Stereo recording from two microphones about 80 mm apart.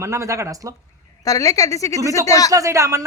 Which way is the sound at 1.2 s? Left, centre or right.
Left.